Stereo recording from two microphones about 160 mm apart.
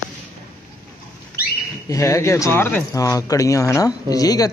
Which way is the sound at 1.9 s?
20° left (ahead or behind).